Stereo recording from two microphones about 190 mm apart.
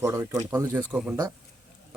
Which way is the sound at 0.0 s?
15° right (ahead or behind).